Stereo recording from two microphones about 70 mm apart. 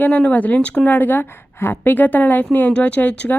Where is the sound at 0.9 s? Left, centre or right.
Left.